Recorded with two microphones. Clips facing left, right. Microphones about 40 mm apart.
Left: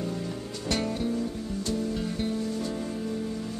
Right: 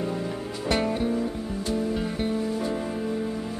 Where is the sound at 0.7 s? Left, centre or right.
Centre.